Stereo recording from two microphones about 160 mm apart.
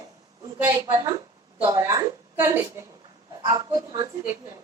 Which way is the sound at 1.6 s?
20° right (ahead or behind).